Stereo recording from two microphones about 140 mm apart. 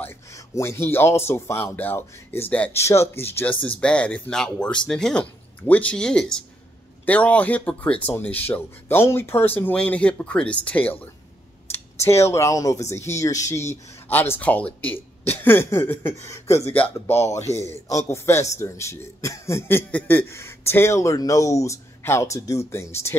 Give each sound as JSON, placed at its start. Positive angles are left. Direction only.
{"t": 0.0, "sound": "a man's voice", "side_deg": 20}